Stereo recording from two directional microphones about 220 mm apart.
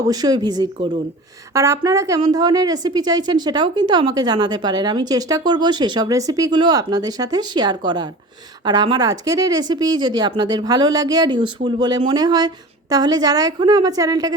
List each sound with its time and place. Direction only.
0.1 s speech: 15° right (ahead or behind)